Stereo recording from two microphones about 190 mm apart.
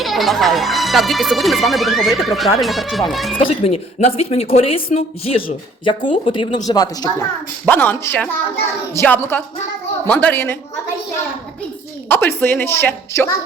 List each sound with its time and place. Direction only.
0.0 s speech: centre (ahead or behind)
3.3 s a woman's voice: 30° left (ahead or behind); by 10.6 s 10° left (ahead or behind)
12.0 s a woman's voice: 10° left (ahead or behind)